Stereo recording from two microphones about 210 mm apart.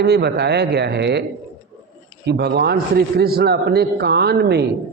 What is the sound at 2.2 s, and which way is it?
A man's voice, 50° right (ahead or behind).